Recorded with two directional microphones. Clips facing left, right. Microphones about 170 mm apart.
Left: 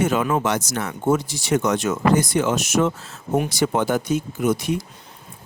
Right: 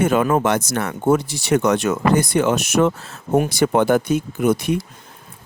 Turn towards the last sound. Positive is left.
turn(degrees=-60)  # may be behind; listen again after turning